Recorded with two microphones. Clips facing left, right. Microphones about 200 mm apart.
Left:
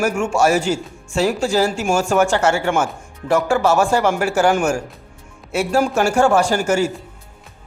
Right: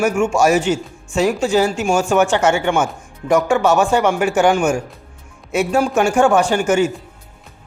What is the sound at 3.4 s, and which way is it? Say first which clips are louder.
Speech: right 1 dB; 5° left (ahead or behind).